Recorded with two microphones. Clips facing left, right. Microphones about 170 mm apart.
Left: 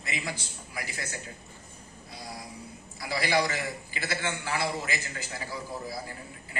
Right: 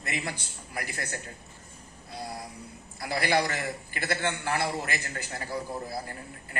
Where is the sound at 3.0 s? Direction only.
55° right (ahead or behind).